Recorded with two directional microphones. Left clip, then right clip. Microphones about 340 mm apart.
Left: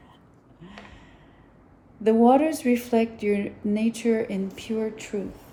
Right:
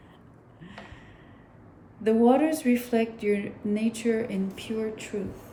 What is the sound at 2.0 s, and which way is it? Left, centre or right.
A woman's voice, centre.